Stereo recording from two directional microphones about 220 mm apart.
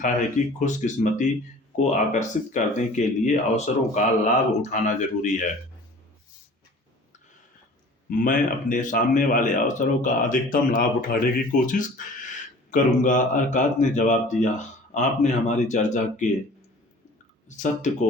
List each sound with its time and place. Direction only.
0.0 s speech: 35° left (ahead or behind)
8.2 s speech: 35° left (ahead or behind)
17.5 s speech: 35° left (ahead or behind)